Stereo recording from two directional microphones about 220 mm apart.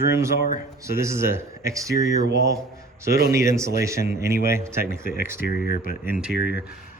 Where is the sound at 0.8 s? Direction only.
15° right (ahead or behind).